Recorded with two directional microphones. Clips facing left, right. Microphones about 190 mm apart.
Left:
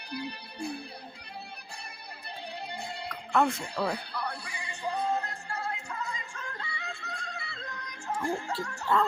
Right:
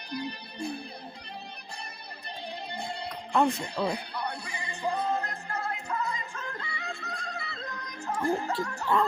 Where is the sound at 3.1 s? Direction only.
15° right (ahead or behind).